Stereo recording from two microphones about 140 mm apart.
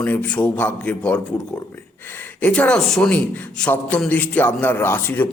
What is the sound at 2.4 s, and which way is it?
A man's voice, 10° left (ahead or behind).